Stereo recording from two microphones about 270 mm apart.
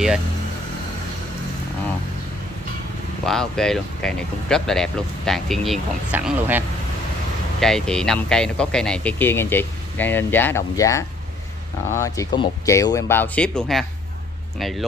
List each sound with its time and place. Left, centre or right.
3.3 s speech: centre
7.6 s speech: centre